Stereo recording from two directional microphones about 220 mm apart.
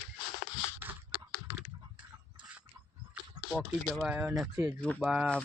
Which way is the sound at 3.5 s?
5° left (ahead or behind).